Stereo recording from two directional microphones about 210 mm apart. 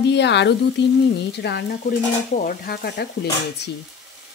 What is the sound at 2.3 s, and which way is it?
Speech, 40° left (ahead or behind).